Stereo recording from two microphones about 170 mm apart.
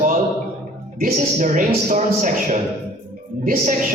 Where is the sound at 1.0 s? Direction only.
50° right (ahead or behind).